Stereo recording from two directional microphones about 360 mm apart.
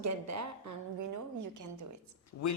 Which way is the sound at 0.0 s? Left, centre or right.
Right.